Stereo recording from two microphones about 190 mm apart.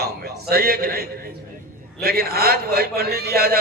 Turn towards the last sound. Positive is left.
turn(degrees=-55)  # may be behind; listen again after turning